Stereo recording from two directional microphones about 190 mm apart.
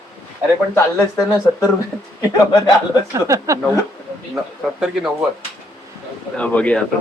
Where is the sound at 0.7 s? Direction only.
15° left (ahead or behind).